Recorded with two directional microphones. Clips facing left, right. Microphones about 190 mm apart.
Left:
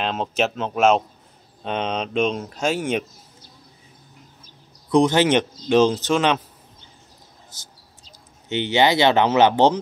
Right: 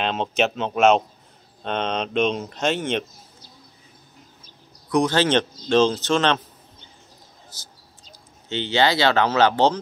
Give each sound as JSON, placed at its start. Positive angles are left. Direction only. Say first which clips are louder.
{"t": 0.0, "sound": "speech", "louder": "even", "side_deg": 5}
{"t": 4.9, "sound": "speech", "louder": "left 3 dB", "side_deg": 20}
{"t": 8.5, "sound": "speech", "louder": "left 2 dB", "side_deg": 15}